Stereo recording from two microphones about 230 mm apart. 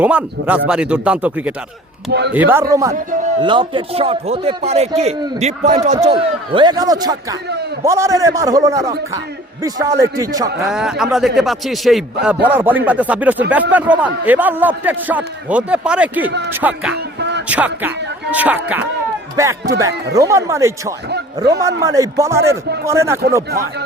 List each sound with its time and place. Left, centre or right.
0.0 s speech: centre
2.0 s speech: right
2.3 s a man's voice: centre
10.7 s a man's voice: centre
16.9 s a sound: right
17.5 s a man's voice: centre